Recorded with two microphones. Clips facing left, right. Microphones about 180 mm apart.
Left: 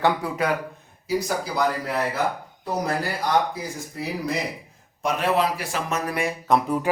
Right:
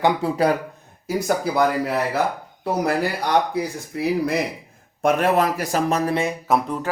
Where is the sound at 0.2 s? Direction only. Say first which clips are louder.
Right 6 dB; 25° right (ahead or behind).